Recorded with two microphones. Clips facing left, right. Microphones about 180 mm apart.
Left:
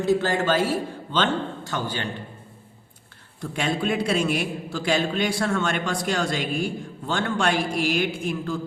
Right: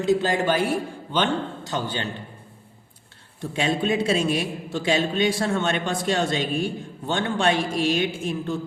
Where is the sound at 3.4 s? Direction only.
25° right (ahead or behind).